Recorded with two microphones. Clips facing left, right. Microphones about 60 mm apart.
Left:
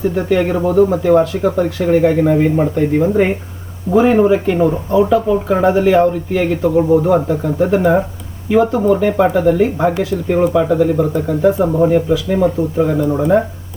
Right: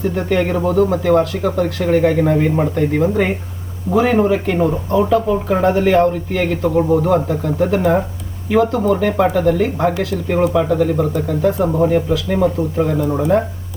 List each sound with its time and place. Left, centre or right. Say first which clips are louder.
0.3 s speech: left 1 dB; centre
3.9 s speech: left 3 dB; centre
4.2 s speech: left 3 dB; centre